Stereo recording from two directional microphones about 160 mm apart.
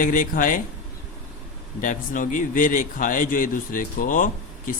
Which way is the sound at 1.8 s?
55° left (ahead or behind).